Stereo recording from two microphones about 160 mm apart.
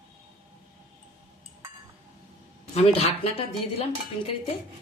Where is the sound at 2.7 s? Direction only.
40° left (ahead or behind).